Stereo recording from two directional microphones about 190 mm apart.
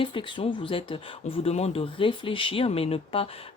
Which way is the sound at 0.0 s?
25° left (ahead or behind).